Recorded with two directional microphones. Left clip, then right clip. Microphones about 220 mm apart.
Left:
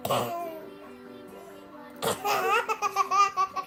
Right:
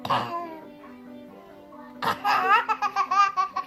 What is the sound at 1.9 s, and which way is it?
Laughter, 20° left (ahead or behind).